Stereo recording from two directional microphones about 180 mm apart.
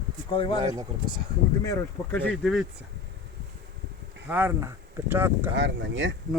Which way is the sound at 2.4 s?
Centre (ahead or behind).